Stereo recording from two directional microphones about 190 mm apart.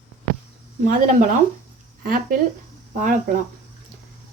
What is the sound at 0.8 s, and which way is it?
Speech, 40° right (ahead or behind).